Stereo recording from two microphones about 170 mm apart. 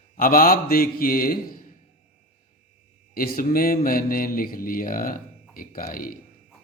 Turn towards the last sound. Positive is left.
turn(degrees=55)  # may be behind; listen again after turning